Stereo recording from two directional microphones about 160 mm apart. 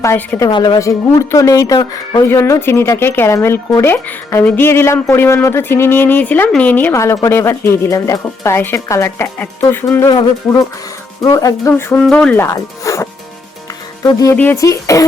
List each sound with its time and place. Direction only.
0.0 s speech: 15° left (ahead or behind)
0.5 s speech: 25° left (ahead or behind)
10.1 s speech: 25° left (ahead or behind); by 12.5 s 10° left (ahead or behind)
12.5 s speech: 20° left (ahead or behind)